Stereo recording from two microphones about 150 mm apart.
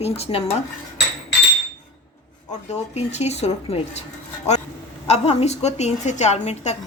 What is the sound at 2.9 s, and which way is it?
Speech, 45° left (ahead or behind).